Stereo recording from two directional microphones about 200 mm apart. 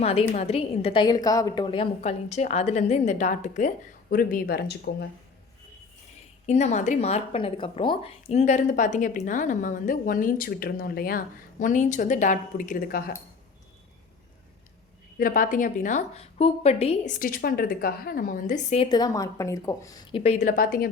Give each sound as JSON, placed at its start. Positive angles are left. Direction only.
{"t": 0.0, "sound": "a woman's voice", "side_deg": 30}
{"t": 6.4, "sound": "a woman's voice", "side_deg": 35}
{"t": 11.6, "sound": "a woman's voice", "side_deg": 40}
{"t": 15.2, "sound": "a woman's voice", "side_deg": 45}
{"t": 17.2, "sound": "a woman's voice", "side_deg": 45}
{"t": 18.9, "sound": "speech", "side_deg": 20}